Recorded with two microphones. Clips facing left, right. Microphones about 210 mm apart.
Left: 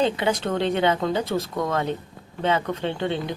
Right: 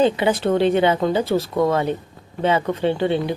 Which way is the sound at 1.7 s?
10° right (ahead or behind).